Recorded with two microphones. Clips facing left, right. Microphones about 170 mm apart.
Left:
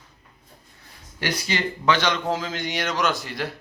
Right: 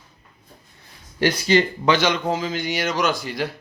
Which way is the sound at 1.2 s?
35° right (ahead or behind).